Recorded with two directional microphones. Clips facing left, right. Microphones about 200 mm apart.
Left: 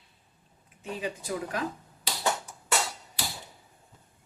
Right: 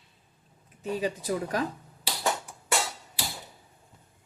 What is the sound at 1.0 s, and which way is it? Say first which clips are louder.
Speech: right 2 dB; 35° right (ahead or behind).